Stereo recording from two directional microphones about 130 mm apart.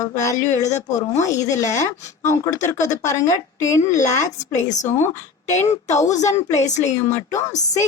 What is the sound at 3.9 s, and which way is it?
Speech, 70° left (ahead or behind).